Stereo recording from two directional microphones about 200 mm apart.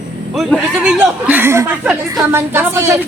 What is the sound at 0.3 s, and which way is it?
A woman's voice, centre (ahead or behind).